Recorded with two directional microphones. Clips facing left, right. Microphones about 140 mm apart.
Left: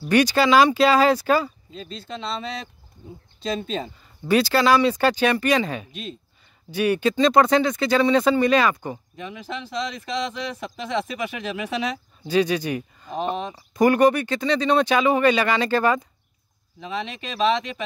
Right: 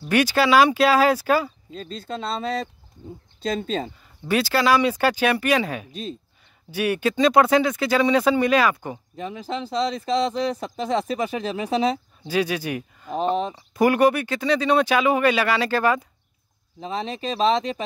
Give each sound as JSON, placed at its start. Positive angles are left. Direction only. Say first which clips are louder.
{"t": 0.0, "sound": "speech", "louder": "left 1 dB", "side_deg": -5}
{"t": 1.7, "sound": "speech", "louder": "right 3 dB", "side_deg": -45}
{"t": 4.3, "sound": "speech", "louder": "left 2 dB", "side_deg": -5}
{"t": 5.9, "sound": "speech", "louder": "right 3 dB", "side_deg": -35}
{"t": 6.7, "sound": "speech", "louder": "left 2 dB", "side_deg": -5}
{"t": 9.1, "sound": "speech", "louder": "right 4 dB", "side_deg": -35}
{"t": 12.3, "sound": "speech", "louder": "left 3 dB", "side_deg": -5}
{"t": 13.2, "sound": "speech", "louder": "right 4 dB", "side_deg": -35}
{"t": 13.7, "sound": "speech", "louder": "left 1 dB", "side_deg": -5}
{"t": 16.8, "sound": "speech", "louder": "right 3 dB", "side_deg": -35}